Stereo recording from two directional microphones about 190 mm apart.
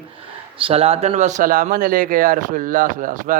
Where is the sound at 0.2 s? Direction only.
30° right (ahead or behind).